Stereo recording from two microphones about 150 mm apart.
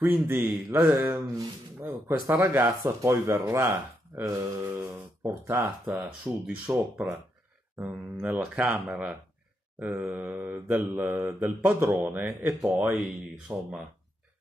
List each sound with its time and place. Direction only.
0.0 s mantra: 10° right (ahead or behind)
1.2 s speech: 25° right (ahead or behind)
1.8 s mantra: 15° right (ahead or behind)
3.0 s speech: 15° right (ahead or behind)
5.2 s mantra: 15° right (ahead or behind)